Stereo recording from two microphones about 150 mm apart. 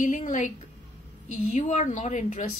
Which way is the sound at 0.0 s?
55° left (ahead or behind).